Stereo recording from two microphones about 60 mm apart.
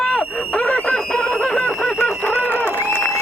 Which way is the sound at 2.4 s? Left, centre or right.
Left.